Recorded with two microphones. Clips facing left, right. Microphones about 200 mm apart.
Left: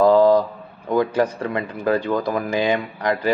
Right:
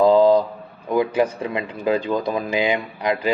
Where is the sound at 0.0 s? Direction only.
20° right (ahead or behind).